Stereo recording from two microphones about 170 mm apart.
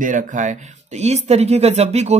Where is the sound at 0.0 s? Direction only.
50° right (ahead or behind).